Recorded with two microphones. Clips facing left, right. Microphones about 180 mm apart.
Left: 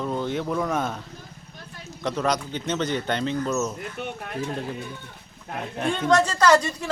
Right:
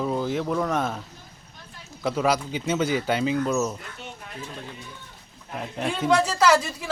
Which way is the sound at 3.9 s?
60° left (ahead or behind).